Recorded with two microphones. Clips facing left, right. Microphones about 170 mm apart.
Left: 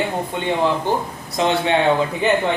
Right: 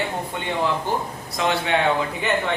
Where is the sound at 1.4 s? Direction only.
25° left (ahead or behind).